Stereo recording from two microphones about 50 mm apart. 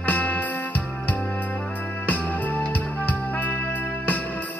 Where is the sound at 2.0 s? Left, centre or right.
Left.